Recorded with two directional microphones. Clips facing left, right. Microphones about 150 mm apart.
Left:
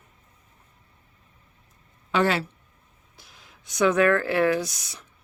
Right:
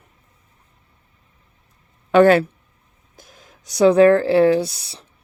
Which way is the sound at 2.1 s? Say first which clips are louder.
Right 11 dB; 50° right (ahead or behind).